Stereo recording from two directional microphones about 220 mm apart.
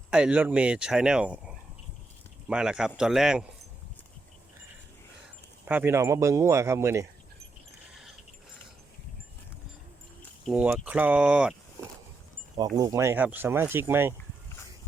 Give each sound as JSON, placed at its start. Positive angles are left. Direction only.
{"t": 0.1, "sound": "speech", "side_deg": -5}
{"t": 5.6, "sound": "speech", "side_deg": -10}
{"t": 10.4, "sound": "speech", "side_deg": -5}
{"t": 11.8, "sound": "a sound", "side_deg": -15}
{"t": 12.5, "sound": "speech", "side_deg": -20}